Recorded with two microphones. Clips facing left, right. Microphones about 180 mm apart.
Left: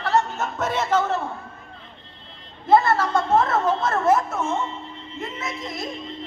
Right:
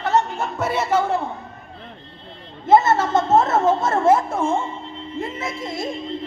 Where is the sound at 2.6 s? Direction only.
20° right (ahead or behind).